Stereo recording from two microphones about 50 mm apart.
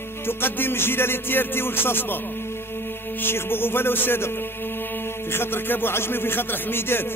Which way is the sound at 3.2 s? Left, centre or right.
Left.